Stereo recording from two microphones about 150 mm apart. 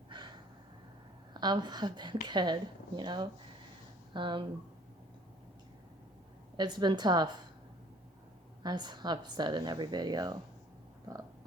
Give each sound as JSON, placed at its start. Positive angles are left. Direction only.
{"t": 0.1, "sound": "gasp", "side_deg": -30}
{"t": 1.3, "sound": "a woman's voice", "side_deg": -30}
{"t": 6.6, "sound": "a woman's voice", "side_deg": -30}
{"t": 8.6, "sound": "a woman's voice", "side_deg": -30}